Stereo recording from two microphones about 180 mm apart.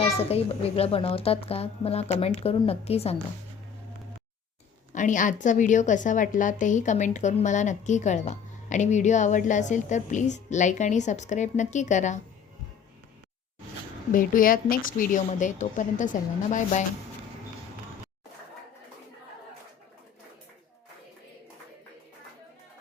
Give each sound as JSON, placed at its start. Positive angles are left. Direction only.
{"t": 0.3, "sound": "a woman's voice", "side_deg": 35}
{"t": 4.9, "sound": "a woman's voice", "side_deg": 45}
{"t": 14.1, "sound": "a woman's voice", "side_deg": 50}